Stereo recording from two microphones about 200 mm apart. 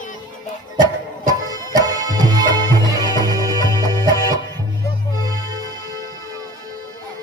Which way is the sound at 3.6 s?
20° left (ahead or behind).